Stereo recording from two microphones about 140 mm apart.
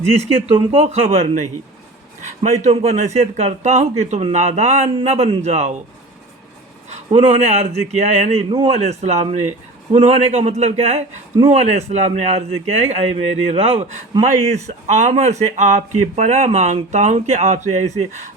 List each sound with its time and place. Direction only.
0.2 s a man's voice: 40° right (ahead or behind)
2.2 s a sound: 50° right (ahead or behind)
2.6 s a man's voice: 50° right (ahead or behind)
6.9 s a man's voice: 45° right (ahead or behind)